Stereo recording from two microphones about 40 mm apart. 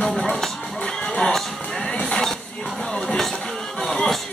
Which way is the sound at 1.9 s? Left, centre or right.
Left.